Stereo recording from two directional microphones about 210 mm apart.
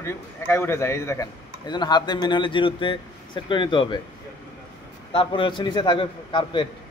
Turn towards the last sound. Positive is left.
turn(degrees=20)  # may be behind; listen again after turning